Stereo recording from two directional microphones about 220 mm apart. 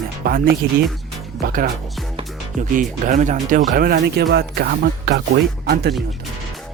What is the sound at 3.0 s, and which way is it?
Speech, 35° right (ahead or behind).